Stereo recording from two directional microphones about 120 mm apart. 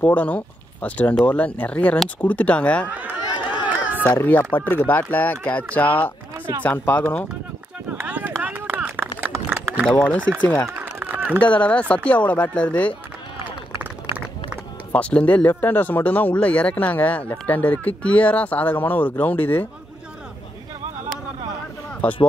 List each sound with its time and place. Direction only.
0.0 s speech: 15° left (ahead or behind)
2.9 s chatter: 15° right (ahead or behind)
4.0 s speech: 15° left (ahead or behind)
7.9 s run: 15° right (ahead or behind)
9.8 s speech: 10° left (ahead or behind)
10.8 s a sound: 15° right (ahead or behind)
11.4 s speech: 10° left (ahead or behind)
14.9 s speech: 10° left (ahead or behind)